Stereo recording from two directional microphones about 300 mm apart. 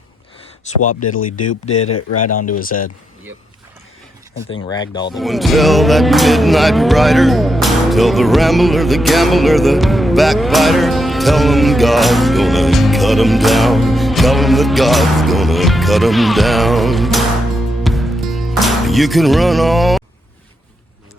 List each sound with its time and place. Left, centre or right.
0.6 s speech: left
1.8 s speech: left
2.5 s speech: left
4.7 s speech: centre
5.1 s music: centre